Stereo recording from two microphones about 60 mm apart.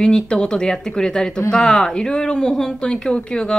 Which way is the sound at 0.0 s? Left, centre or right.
Centre.